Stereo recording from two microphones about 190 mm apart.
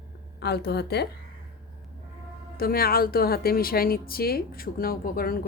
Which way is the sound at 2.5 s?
50° left (ahead or behind).